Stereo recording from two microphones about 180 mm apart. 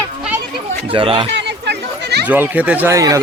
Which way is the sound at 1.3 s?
70° right (ahead or behind).